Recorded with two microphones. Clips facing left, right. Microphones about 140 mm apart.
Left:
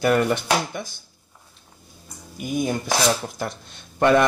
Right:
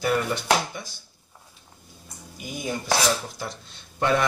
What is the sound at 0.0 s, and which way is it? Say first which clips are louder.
Speech: left 5 dB; 60° left (ahead or behind).